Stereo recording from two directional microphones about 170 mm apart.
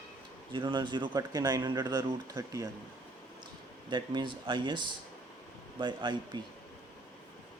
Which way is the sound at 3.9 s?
25° right (ahead or behind).